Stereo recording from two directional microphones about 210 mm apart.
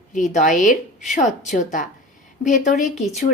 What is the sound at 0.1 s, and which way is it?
A woman's voice, 35° left (ahead or behind).